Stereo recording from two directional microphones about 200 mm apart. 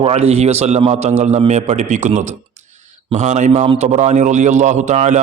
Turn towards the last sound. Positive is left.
turn(degrees=-35)  # may be behind; listen again after turning